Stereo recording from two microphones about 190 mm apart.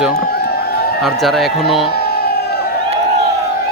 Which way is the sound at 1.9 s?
55° left (ahead or behind).